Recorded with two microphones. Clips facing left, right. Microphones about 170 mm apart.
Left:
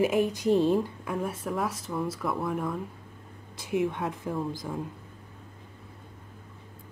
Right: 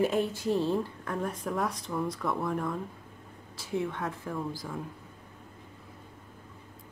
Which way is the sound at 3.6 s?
20° left (ahead or behind).